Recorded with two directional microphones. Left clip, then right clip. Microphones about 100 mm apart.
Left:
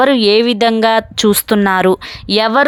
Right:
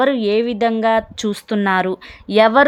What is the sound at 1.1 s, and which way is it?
Speech, 60° left (ahead or behind).